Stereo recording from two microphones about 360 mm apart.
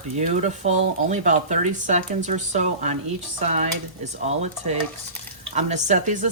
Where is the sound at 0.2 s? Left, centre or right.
Centre.